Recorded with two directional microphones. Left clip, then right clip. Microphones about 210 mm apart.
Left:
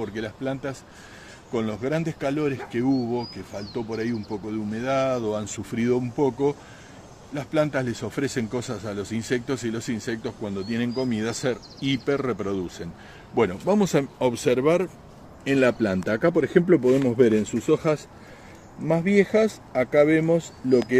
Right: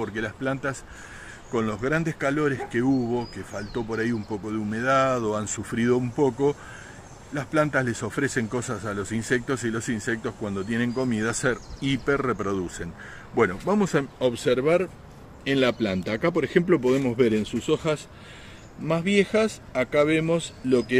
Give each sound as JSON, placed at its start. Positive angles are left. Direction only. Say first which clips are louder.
{"t": 0.0, "sound": "speech", "louder": "right 1 dB", "side_deg": 10}
{"t": 5.2, "sound": "speech", "louder": "right 1 dB", "side_deg": 15}
{"t": 15.4, "sound": "speech", "louder": "left 2 dB", "side_deg": 15}
{"t": 16.4, "sound": "speech", "louder": "left 2 dB", "side_deg": 65}
{"t": 16.7, "sound": "speech", "louder": "left 3 dB", "side_deg": 5}
{"t": 19.1, "sound": "speech", "louder": "left 2 dB", "side_deg": 20}